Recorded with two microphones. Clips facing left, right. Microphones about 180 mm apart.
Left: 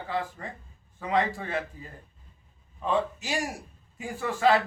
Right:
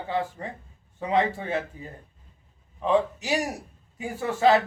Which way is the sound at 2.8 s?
20° right (ahead or behind).